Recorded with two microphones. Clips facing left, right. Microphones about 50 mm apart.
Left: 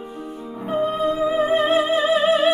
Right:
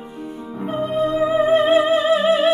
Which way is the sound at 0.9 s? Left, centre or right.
Centre.